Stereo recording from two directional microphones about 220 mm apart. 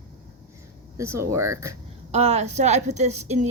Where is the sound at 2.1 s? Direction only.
30° right (ahead or behind).